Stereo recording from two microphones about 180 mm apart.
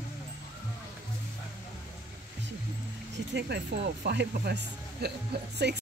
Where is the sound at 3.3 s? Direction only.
70° right (ahead or behind).